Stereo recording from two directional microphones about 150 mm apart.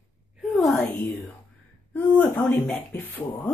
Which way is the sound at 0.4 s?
Centre (ahead or behind).